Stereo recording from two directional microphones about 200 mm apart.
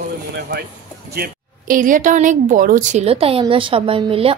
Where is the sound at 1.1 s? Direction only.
45° right (ahead or behind).